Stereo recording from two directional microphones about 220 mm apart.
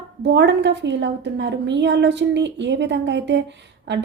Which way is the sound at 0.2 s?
50° right (ahead or behind).